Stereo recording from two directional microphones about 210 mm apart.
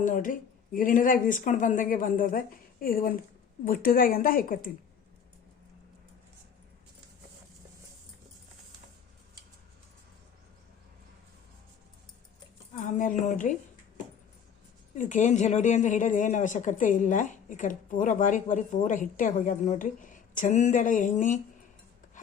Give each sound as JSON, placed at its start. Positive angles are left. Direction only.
{"t": 0.0, "sound": "a woman's voice", "side_deg": 40}
{"t": 12.7, "sound": "a woman's voice", "side_deg": 40}
{"t": 14.9, "sound": "a woman's voice", "side_deg": 35}